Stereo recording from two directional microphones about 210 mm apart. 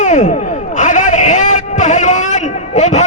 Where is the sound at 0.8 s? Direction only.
35° left (ahead or behind).